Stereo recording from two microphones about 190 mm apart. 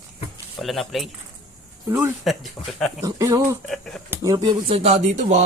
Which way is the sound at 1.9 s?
10° right (ahead or behind).